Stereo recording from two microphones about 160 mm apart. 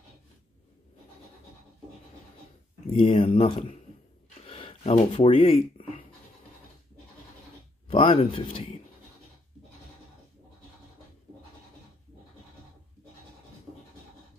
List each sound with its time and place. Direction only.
2.9 s speech: 35° left (ahead or behind)
4.5 s a sound: 35° left (ahead or behind)
5.1 s speech: 35° left (ahead or behind)
7.9 s speech: 35° left (ahead or behind)